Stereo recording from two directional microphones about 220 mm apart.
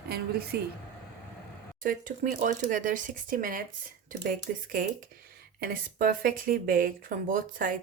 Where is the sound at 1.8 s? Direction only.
35° right (ahead or behind).